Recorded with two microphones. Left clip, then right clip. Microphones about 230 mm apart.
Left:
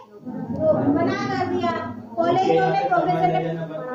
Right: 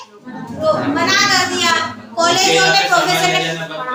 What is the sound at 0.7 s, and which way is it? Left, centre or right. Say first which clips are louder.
A woman's voice: right 5 dB; right.